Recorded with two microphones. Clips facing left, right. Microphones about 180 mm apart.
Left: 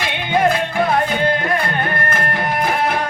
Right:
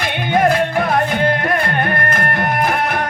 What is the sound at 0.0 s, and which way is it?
Music, 55° right (ahead or behind).